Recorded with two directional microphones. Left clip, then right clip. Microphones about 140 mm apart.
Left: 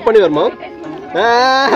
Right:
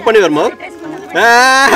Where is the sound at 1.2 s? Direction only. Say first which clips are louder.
Right 4 dB; 15° right (ahead or behind).